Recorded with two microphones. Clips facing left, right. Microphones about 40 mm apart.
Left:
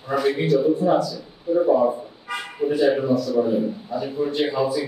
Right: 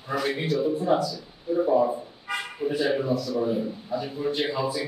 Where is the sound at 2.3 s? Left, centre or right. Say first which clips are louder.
Left 4 dB; centre.